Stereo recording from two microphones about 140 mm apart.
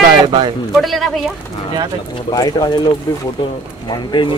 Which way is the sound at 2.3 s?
30° left (ahead or behind).